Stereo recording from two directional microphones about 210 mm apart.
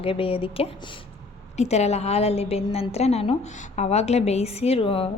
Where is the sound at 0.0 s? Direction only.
25° left (ahead or behind).